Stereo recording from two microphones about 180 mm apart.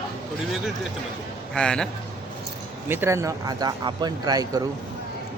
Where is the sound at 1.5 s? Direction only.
5° left (ahead or behind).